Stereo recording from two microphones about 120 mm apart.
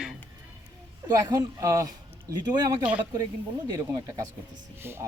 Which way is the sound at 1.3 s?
30° right (ahead or behind).